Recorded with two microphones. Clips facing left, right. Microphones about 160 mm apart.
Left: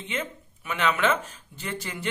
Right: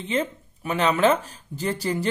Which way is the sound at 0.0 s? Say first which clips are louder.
Right 7 dB; 35° right (ahead or behind).